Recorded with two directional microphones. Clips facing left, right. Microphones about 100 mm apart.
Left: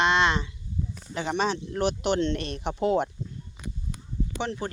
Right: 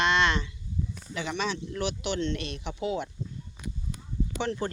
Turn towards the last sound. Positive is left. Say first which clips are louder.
# right 1 dB
turn(degrees=20)  # may be behind; listen again after turning